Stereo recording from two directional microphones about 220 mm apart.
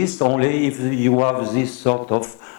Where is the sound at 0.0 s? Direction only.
25° left (ahead or behind).